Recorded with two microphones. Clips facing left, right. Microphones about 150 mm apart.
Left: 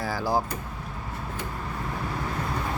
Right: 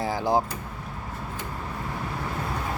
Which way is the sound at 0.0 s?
20° right (ahead or behind).